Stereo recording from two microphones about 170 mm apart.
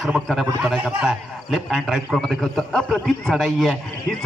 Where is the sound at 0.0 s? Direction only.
Centre (ahead or behind).